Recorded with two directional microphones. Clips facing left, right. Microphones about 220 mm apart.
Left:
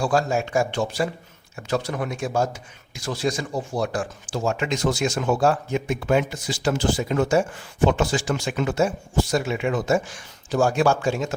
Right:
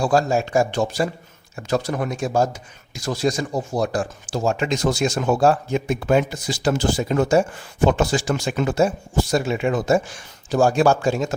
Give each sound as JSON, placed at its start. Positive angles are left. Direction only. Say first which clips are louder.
{"t": 0.0, "sound": "a man's voice", "louder": "right 3 dB", "side_deg": -35}